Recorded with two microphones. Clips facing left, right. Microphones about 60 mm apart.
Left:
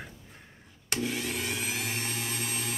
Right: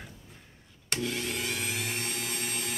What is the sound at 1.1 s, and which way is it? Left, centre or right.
Vehicle, centre.